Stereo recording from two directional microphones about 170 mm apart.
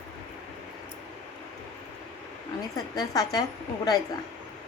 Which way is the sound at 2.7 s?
20° left (ahead or behind).